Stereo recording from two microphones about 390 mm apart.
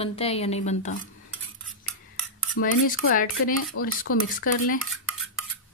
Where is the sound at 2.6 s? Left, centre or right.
Left.